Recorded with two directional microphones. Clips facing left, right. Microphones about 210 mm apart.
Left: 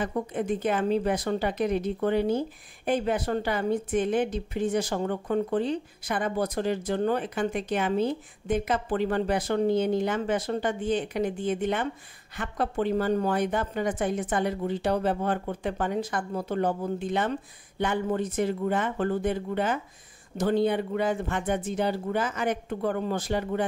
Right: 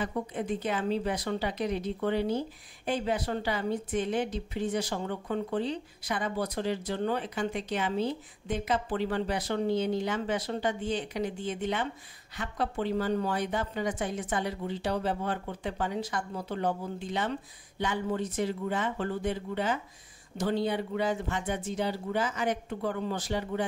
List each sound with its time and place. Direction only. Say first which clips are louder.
0.0 s speech: left 4 dB; 50° left (ahead or behind)